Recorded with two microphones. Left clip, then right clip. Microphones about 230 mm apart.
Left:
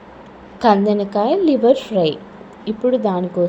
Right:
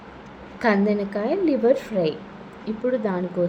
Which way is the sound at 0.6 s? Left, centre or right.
Centre.